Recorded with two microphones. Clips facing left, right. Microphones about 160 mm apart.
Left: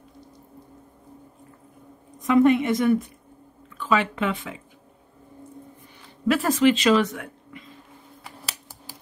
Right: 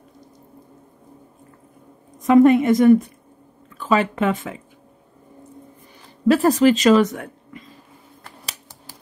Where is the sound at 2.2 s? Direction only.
45° right (ahead or behind).